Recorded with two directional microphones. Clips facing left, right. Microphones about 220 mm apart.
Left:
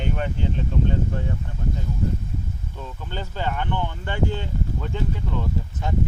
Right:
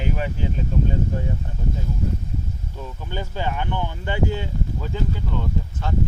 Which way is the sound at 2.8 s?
10° right (ahead or behind).